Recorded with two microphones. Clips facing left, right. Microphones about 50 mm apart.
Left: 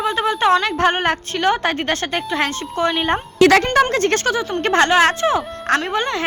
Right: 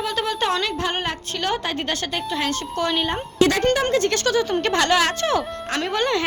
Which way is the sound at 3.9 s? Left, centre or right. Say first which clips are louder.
Left 2 dB; left.